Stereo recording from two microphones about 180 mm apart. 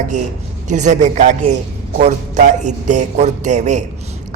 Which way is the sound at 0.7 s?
40° right (ahead or behind).